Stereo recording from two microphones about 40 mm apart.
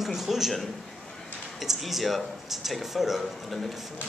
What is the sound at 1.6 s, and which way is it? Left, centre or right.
Speech, centre.